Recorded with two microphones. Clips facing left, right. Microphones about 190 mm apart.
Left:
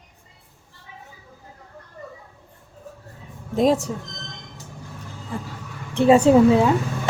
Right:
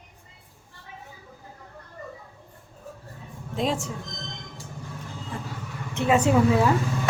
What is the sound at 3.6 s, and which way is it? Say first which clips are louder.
Speech: left 8 dB; 40° left (ahead or behind).